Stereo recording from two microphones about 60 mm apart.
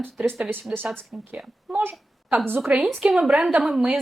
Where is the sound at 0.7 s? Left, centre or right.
Right.